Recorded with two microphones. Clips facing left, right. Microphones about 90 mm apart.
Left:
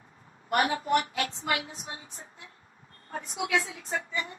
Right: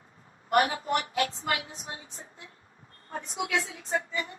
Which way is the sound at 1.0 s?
35° right (ahead or behind).